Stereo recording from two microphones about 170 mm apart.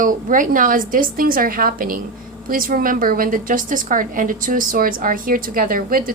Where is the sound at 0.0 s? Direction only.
50° right (ahead or behind).